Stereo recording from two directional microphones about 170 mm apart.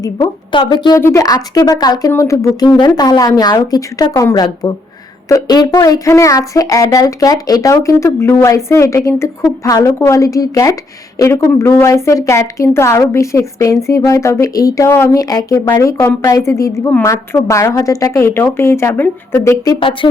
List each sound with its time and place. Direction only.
0.0 s speech: 25° left (ahead or behind); by 19.5 s 10° left (ahead or behind)
19.6 s speech: 30° left (ahead or behind)